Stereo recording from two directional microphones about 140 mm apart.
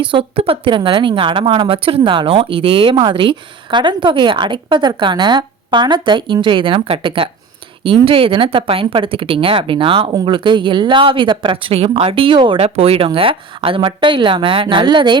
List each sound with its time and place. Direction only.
0.0 s a woman's voice: 35° right (ahead or behind)